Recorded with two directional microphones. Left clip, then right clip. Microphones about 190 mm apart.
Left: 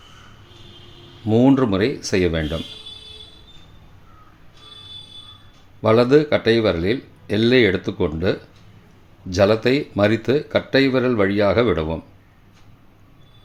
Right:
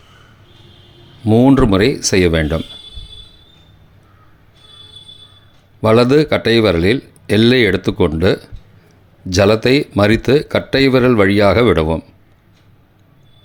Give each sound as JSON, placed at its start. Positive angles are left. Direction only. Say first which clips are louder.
{"t": 1.2, "sound": "speech", "louder": "right 5 dB", "side_deg": -35}
{"t": 5.8, "sound": "speech", "louder": "right 4 dB", "side_deg": -35}